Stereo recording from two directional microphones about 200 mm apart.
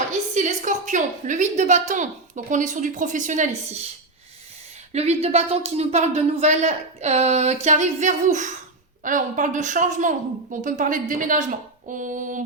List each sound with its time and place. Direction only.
0.3 s speech: 40° right (ahead or behind)
4.9 s speech: 30° right (ahead or behind)